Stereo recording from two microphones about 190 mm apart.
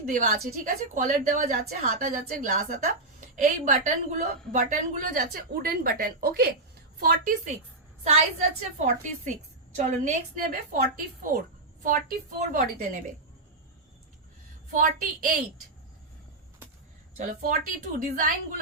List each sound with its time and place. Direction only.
0.0 s a woman's voice: 45° right (ahead or behind)
11.8 s a woman's voice: 45° right (ahead or behind)
14.7 s a woman's voice: 40° right (ahead or behind)
17.2 s a woman's voice: 40° right (ahead or behind)